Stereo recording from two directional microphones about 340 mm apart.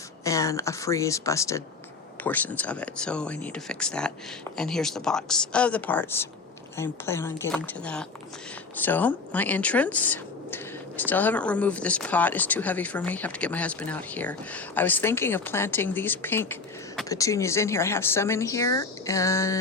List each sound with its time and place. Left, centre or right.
0.3 s speech: centre